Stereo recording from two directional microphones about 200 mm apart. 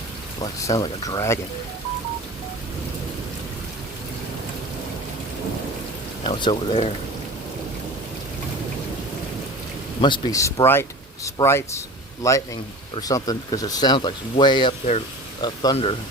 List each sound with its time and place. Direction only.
0.4 s speech: 15° left (ahead or behind)
6.2 s speech: 25° left (ahead or behind)
10.0 s speech: 20° left (ahead or behind)